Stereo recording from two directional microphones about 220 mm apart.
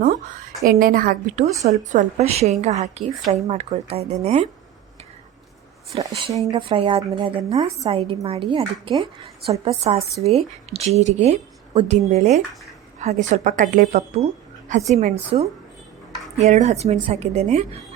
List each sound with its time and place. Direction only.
0.7 s a woman's voice: 40° right (ahead or behind)
6.0 s a woman's voice: 20° right (ahead or behind)